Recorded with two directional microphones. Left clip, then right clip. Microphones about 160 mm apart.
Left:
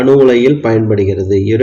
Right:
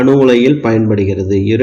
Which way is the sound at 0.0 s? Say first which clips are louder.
Left 1 dB; 15° right (ahead or behind).